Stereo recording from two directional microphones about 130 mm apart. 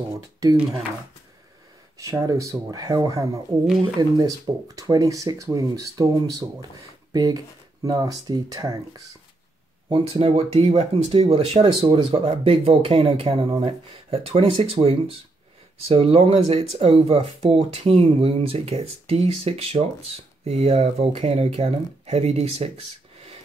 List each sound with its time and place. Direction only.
2.0 s speech: 25° right (ahead or behind)
10.0 s speech: 50° right (ahead or behind)